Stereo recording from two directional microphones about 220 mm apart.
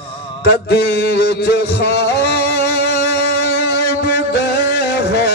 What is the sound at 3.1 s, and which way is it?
Music, 45° left (ahead or behind).